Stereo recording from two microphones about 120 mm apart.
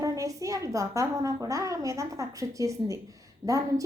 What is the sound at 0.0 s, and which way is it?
A woman's voice, 30° right (ahead or behind).